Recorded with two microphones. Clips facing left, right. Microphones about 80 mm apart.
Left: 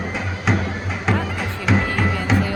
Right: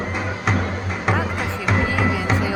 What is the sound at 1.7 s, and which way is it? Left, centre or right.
Music, centre.